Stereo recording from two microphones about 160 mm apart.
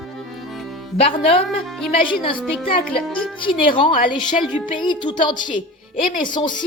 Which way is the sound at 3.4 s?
30° left (ahead or behind).